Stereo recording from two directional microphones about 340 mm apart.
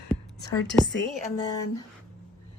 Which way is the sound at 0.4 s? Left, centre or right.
Centre.